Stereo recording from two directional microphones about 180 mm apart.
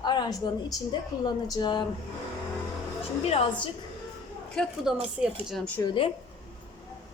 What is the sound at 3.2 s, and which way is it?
Speech, 35° left (ahead or behind).